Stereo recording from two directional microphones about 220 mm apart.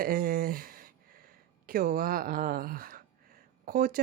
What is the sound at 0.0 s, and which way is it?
Speech, 40° right (ahead or behind).